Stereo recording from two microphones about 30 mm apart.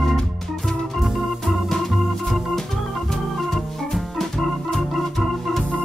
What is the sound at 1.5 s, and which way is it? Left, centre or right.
Organ, centre.